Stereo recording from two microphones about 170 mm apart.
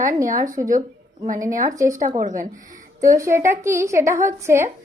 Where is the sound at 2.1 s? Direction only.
50° right (ahead or behind).